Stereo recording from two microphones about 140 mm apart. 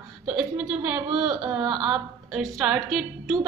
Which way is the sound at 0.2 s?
5° right (ahead or behind).